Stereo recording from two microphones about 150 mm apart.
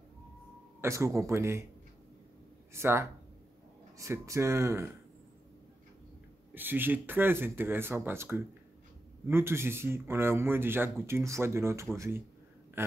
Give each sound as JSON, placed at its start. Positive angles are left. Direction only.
{"t": 0.7, "sound": "speech", "side_deg": -20}
{"t": 2.7, "sound": "speech", "side_deg": -15}
{"t": 6.5, "sound": "speech", "side_deg": -15}